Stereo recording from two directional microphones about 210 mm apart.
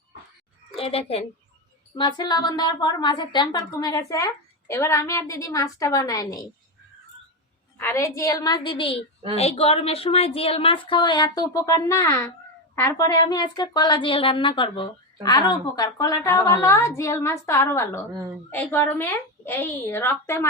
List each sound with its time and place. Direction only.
0.8 s a woman's voice: 25° left (ahead or behind)
7.8 s a woman's voice: 10° left (ahead or behind)